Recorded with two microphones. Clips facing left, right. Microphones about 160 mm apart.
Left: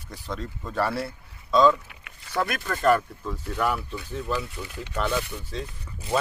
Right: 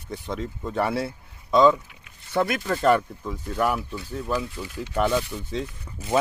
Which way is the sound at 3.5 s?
10° right (ahead or behind).